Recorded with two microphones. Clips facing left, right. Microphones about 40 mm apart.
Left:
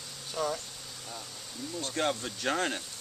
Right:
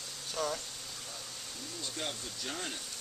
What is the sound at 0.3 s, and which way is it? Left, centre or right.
Insect, centre.